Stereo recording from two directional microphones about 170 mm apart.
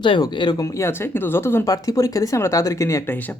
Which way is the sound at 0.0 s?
25° left (ahead or behind).